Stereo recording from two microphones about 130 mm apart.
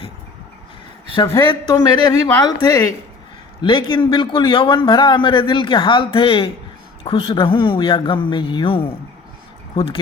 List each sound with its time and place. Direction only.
1.7 s a man's voice: 30° left (ahead or behind)